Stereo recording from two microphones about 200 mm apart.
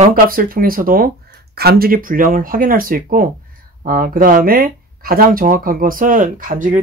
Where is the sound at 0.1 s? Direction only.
45° right (ahead or behind).